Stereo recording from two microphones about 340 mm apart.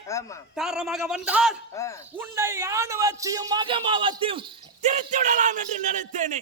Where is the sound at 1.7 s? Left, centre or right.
Centre.